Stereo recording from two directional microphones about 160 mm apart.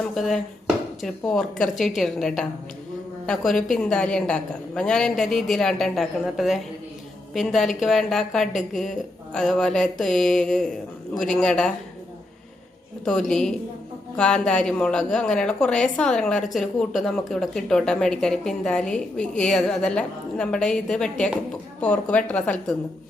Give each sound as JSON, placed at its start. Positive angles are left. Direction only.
{"t": 0.0, "sound": "a woman's voice", "side_deg": 0}
{"t": 13.1, "sound": "a woman's voice", "side_deg": 5}